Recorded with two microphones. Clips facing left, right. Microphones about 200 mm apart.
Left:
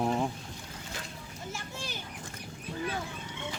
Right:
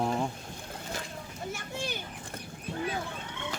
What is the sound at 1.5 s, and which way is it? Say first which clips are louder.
Children playing: right 4 dB; 60° right (ahead or behind).